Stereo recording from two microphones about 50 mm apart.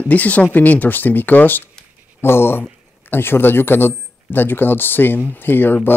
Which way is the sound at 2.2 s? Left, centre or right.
Left.